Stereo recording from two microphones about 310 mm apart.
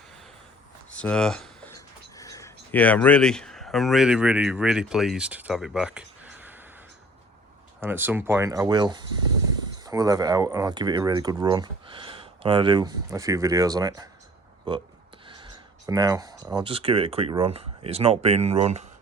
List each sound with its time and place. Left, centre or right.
0.9 s speech: centre
7.8 s speech: centre